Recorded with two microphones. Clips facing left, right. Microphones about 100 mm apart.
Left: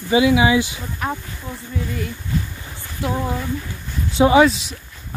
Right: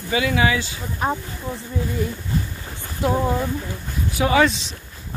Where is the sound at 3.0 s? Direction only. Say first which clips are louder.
Right 3 dB; 25° right (ahead or behind).